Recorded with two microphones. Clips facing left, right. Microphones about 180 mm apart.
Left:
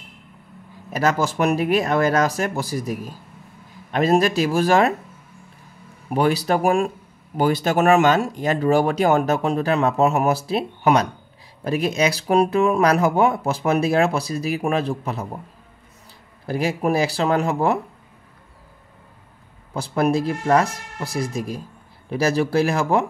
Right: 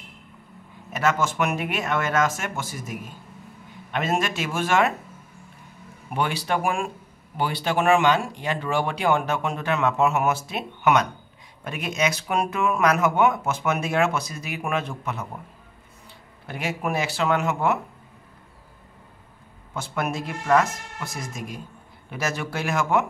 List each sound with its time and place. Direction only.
0.9 s speech: 35° left (ahead or behind)
6.0 s speech: 40° left (ahead or behind)
16.4 s speech: 35° left (ahead or behind)
19.7 s speech: 35° left (ahead or behind)